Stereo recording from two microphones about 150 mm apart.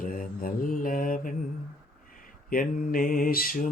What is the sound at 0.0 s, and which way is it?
Mantra, 65° left (ahead or behind).